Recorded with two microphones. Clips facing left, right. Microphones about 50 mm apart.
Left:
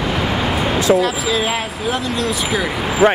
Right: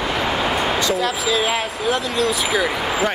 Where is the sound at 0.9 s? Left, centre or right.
Centre.